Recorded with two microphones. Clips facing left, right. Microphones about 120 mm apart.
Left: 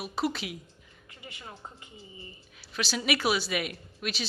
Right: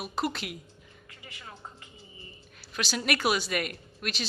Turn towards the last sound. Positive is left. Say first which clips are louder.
# left 1 dB
turn(degrees=0)  # may be behind; listen again after turning